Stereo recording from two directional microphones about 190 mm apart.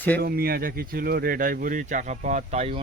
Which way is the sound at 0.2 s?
55° right (ahead or behind).